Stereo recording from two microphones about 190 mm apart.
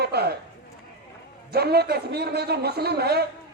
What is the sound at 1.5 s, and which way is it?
Speech, 55° right (ahead or behind).